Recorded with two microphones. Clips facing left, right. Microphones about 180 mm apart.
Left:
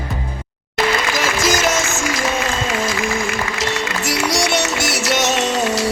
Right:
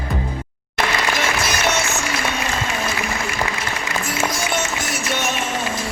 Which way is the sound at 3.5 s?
85° left.